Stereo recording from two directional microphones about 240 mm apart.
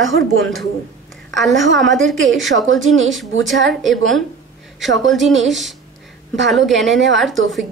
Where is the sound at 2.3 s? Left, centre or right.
Right.